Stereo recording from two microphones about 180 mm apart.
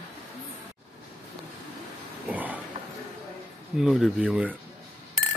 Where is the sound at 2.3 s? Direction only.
10° right (ahead or behind).